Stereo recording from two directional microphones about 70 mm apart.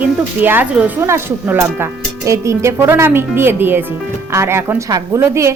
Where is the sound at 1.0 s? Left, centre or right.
Right.